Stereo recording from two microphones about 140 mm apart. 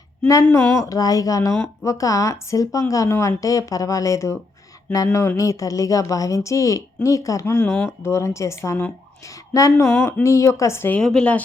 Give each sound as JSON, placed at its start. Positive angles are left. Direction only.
{"t": 0.5, "sound": "speech", "side_deg": 20}
{"t": 5.4, "sound": "speech", "side_deg": 25}
{"t": 7.6, "sound": "a woman's voice", "side_deg": 5}
{"t": 7.9, "sound": "speech", "side_deg": 20}
{"t": 11.0, "sound": "a woman's voice", "side_deg": 5}